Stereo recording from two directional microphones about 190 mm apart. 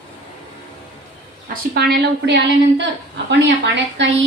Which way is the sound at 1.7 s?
55° right (ahead or behind).